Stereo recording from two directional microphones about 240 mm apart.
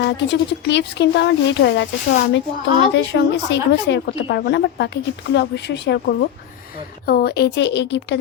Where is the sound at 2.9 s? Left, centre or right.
Left.